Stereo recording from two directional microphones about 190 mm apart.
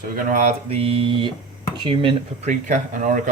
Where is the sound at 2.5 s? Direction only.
40° right (ahead or behind).